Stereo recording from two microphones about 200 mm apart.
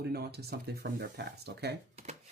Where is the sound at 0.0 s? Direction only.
50° right (ahead or behind).